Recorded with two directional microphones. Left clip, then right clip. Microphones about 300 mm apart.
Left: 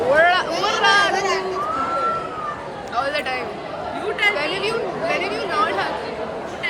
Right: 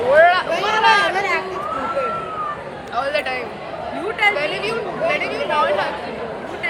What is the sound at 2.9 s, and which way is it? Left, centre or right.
Speech, centre.